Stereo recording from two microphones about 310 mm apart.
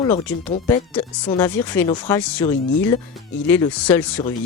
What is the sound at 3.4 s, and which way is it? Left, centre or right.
Speech, centre.